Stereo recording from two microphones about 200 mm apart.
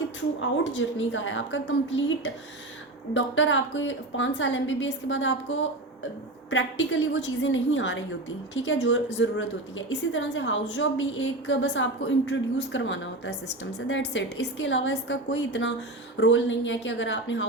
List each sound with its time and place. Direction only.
0.3 s a woman's voice: 70° left (ahead or behind)